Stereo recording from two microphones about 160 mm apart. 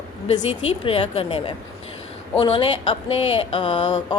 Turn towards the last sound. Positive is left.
turn(degrees=30)  # may be behind; listen again after turning